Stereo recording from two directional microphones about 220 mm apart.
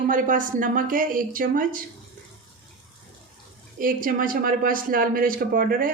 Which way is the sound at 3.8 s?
40° right (ahead or behind).